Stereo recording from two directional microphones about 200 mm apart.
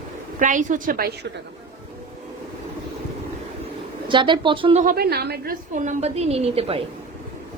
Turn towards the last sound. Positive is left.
turn(degrees=-30)  # may be behind; listen again after turning